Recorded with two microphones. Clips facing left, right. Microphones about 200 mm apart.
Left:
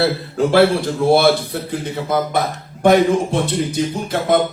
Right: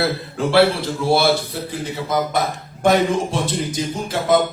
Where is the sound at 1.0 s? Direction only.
55° left (ahead or behind).